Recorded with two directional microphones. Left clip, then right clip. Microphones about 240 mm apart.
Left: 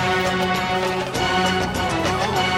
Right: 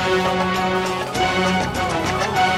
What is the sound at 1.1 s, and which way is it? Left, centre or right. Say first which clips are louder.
Music: right 2 dB; centre.